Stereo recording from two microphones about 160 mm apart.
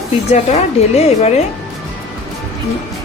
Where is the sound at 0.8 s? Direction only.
40° left (ahead or behind).